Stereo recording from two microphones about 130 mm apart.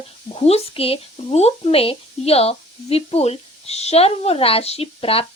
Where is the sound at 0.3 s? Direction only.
50° left (ahead or behind).